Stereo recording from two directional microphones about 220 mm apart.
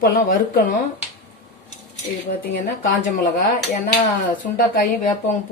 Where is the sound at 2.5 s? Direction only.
40° left (ahead or behind).